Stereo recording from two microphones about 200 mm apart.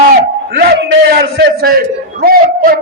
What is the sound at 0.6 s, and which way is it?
A man's voice, 55° right (ahead or behind).